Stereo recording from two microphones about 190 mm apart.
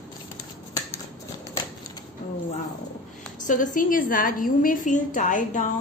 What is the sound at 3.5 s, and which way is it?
A woman's voice, 45° left (ahead or behind).